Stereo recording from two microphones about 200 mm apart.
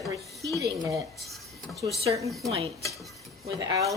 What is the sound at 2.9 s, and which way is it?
Dishes, centre (ahead or behind).